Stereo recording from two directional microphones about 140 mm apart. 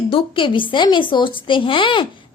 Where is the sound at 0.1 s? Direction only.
40° left (ahead or behind).